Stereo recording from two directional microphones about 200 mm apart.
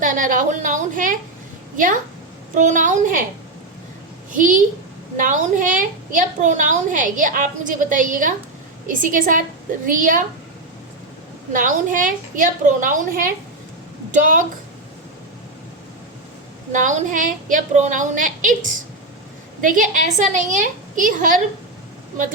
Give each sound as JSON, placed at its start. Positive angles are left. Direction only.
{"t": 0.0, "sound": "a woman's voice", "side_deg": -40}
{"t": 4.3, "sound": "a woman's voice", "side_deg": -40}
{"t": 11.5, "sound": "a woman's voice", "side_deg": -40}
{"t": 16.7, "sound": "a woman's voice", "side_deg": -40}